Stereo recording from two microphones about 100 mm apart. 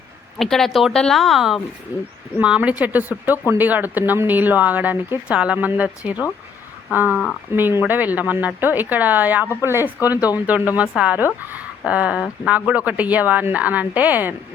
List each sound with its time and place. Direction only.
0.3 s speech: 5° left (ahead or behind)
1.9 s speech: 20° right (ahead or behind)